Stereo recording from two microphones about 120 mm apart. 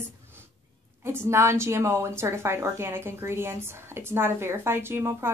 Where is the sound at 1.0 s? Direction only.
20° right (ahead or behind).